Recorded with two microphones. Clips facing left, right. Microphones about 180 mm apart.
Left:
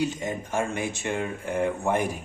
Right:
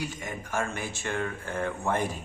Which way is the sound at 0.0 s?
25° left (ahead or behind).